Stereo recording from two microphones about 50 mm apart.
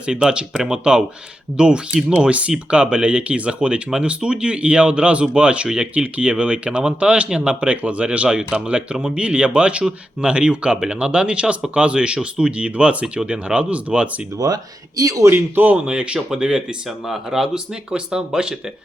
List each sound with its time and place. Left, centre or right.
0.0 s speech: centre
15.3 s speech: right
15.9 s speech: centre